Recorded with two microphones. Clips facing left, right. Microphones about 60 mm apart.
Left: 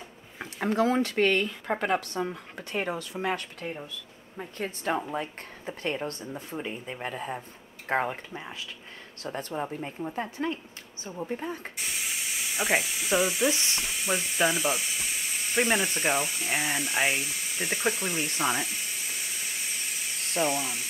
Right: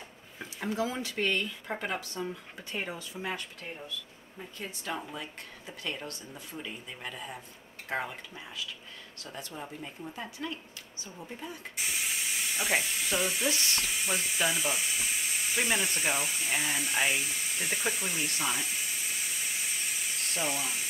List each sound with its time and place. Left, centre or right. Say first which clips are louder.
0.6 s speech: left 8 dB; left
4.4 s a woman's voice: left 7 dB; left
11.7 s speech: even; centre
13.5 s sizzle: left 2 dB; centre
13.8 s speech: left 2 dB; centre